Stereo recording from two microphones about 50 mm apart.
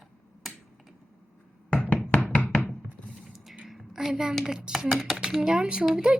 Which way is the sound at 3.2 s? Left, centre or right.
Centre.